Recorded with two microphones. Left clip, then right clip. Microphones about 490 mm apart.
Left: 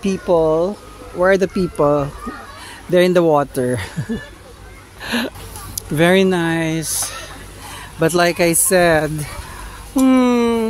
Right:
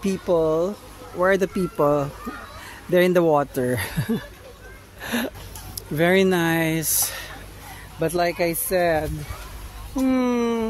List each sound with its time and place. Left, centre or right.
0.0 s speech: right
5.0 s a sound: right
5.8 s speech: right